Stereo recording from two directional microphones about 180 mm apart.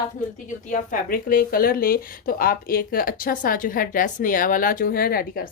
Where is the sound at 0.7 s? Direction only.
50° left (ahead or behind).